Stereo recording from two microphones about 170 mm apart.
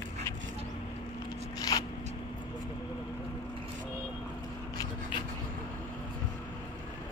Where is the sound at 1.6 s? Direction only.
20° left (ahead or behind).